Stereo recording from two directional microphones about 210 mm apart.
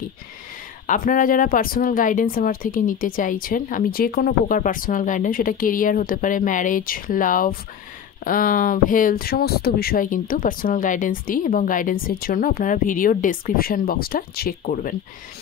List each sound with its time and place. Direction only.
0.8 s speech: 40° left (ahead or behind)